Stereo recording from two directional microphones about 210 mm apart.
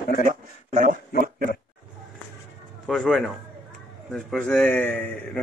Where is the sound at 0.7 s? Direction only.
35° right (ahead or behind).